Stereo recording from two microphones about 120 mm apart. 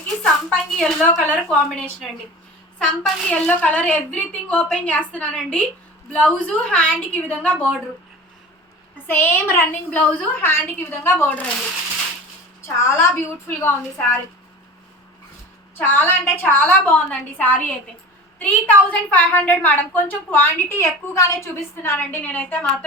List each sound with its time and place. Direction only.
0.2 s a woman's voice: 5° left (ahead or behind)
9.0 s a woman's voice: 20° left (ahead or behind)
12.6 s a woman's voice: 20° left (ahead or behind)
15.8 s a woman's voice: 15° left (ahead or behind)